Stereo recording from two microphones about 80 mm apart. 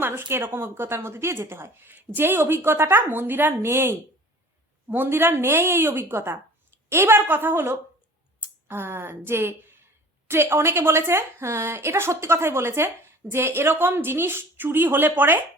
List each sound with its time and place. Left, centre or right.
0.0 s a woman's voice: right